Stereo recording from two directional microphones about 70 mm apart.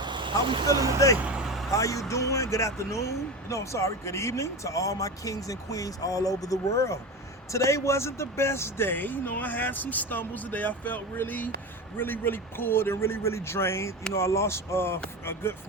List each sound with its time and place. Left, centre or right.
0.6 s speech: right
1.2 s vehicle: centre
1.7 s a man's voice: left